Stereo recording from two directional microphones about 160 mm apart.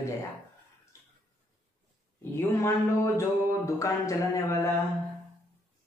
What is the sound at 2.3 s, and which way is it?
Speech, 15° left (ahead or behind).